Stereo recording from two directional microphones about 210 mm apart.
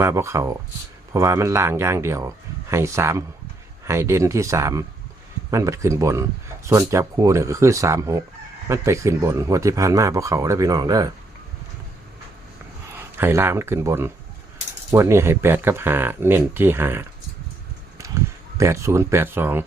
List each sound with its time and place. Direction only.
0.0 s speech: 15° right (ahead or behind)
13.1 s speech: 10° right (ahead or behind)
18.5 s speech: 15° right (ahead or behind)